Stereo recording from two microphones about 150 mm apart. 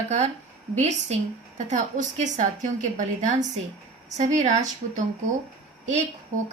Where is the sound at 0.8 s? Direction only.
45° right (ahead or behind).